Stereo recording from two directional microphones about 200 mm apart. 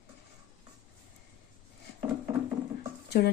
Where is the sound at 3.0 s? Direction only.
55° left (ahead or behind).